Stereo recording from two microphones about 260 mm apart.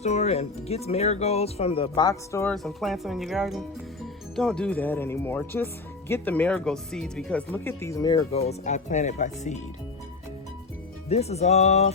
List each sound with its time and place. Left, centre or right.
0.0 s speech: left
11.1 s speech: left